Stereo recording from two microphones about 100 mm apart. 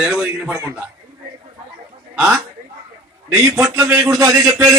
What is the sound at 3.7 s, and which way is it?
A man's voice, 30° right (ahead or behind).